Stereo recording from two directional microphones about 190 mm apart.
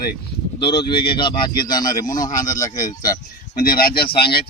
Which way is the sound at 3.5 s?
50° left (ahead or behind).